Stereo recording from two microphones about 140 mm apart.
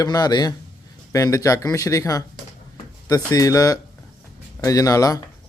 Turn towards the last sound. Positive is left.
turn(degrees=25)  # may be behind; listen again after turning